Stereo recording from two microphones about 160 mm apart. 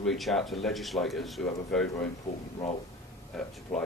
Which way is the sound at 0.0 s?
Centre (ahead or behind).